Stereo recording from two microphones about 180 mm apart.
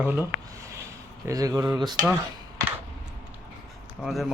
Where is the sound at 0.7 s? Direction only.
15° right (ahead or behind).